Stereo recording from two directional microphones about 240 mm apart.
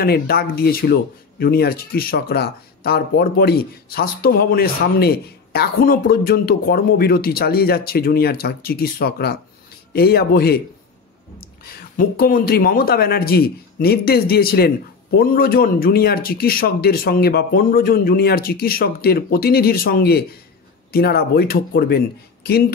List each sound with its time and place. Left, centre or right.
0.0 s speech: left